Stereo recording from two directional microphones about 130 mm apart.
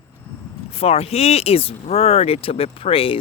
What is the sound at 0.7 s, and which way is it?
Speech, 50° left (ahead or behind).